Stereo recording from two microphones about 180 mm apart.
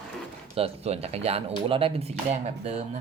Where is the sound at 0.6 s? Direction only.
35° right (ahead or behind).